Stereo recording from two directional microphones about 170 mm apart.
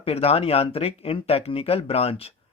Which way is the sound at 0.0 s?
35° left (ahead or behind).